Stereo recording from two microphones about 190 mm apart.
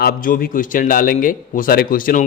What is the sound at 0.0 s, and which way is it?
A man's voice, 50° left (ahead or behind).